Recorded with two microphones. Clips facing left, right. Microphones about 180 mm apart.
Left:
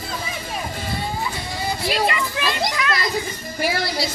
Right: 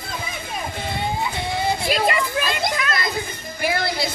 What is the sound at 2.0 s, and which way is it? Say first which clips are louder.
Children playing: right 1 dB; 50° right (ahead or behind).